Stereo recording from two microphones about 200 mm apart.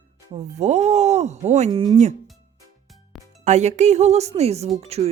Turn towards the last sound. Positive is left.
turn(degrees=-30)  # may be behind; listen again after turning